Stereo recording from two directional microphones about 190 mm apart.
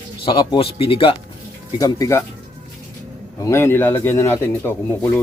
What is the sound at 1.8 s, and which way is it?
Speech, 15° left (ahead or behind).